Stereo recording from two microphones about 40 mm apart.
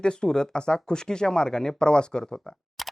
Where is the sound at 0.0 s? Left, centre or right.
Left.